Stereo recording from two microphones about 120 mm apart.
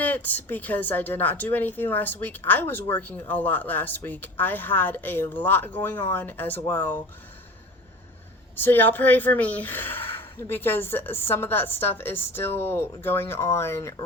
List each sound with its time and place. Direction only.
0.0 s a woman's voice: 15° left (ahead or behind)
8.5 s a woman's voice: 15° left (ahead or behind)